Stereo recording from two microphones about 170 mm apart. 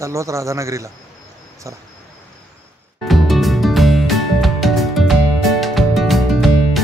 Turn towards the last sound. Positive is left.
turn(degrees=0)  # may be behind; listen again after turning